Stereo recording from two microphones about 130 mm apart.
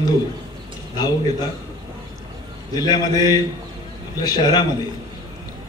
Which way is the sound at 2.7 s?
30° left (ahead or behind).